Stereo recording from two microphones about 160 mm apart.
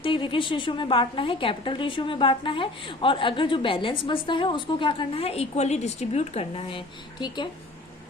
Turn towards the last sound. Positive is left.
turn(degrees=30)  # may be behind; listen again after turning